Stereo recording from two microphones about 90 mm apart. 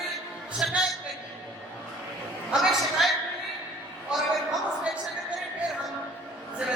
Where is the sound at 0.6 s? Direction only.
10° right (ahead or behind).